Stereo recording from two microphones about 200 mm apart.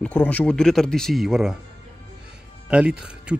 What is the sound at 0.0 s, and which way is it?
Speech, 5° left (ahead or behind).